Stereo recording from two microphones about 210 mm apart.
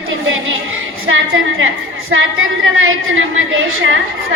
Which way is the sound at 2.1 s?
65° right (ahead or behind).